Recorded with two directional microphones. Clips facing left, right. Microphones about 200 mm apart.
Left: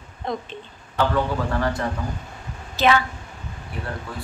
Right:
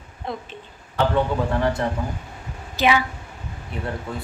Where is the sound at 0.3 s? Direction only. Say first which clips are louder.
Left 3 dB; 5° right (ahead or behind).